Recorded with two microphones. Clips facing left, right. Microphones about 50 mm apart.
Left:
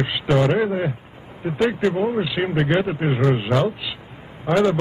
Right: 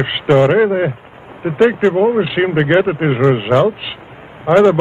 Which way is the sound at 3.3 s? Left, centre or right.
Right.